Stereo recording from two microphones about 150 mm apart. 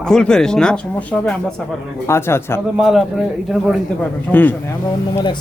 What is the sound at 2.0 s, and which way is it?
Speech, 15° left (ahead or behind).